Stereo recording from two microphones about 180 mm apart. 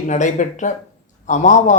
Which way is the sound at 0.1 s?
45° left (ahead or behind).